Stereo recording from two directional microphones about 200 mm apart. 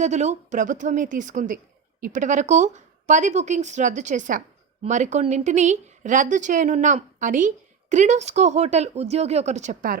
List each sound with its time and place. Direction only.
0.0 s speech: 35° right (ahead or behind)